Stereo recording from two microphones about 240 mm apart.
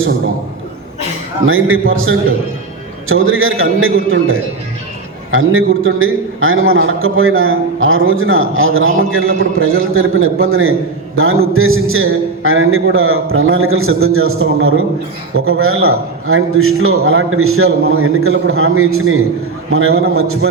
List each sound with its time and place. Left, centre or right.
1.5 s a man's voice: right